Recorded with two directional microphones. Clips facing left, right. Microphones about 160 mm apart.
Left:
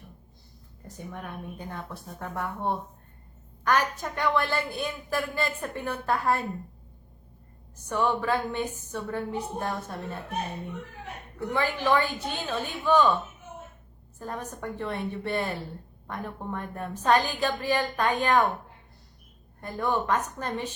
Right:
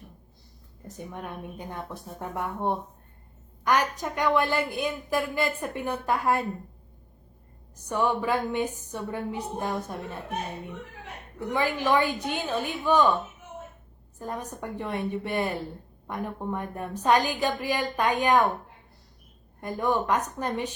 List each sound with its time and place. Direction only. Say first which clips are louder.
0.9 s a woman's voice: right 1 dB; 20° right (ahead or behind)
7.9 s a woman's voice: even; 15° right (ahead or behind)
11.3 s a woman's voice: right 1 dB; 10° right (ahead or behind)
14.2 s a woman's voice: right 1 dB; 10° right (ahead or behind)
19.6 s a woman's voice: right 2 dB; 15° right (ahead or behind)